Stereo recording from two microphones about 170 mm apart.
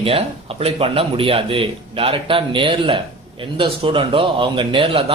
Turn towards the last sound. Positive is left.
turn(degrees=-35)  # may be behind; listen again after turning